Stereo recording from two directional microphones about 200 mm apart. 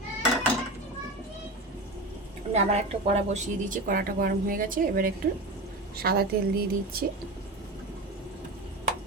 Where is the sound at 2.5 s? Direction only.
30° right (ahead or behind); by 6.2 s 50° right (ahead or behind).